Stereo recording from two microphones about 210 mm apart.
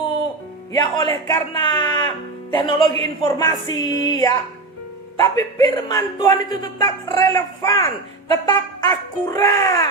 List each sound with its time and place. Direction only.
0.7 s a man's voice: 20° left (ahead or behind)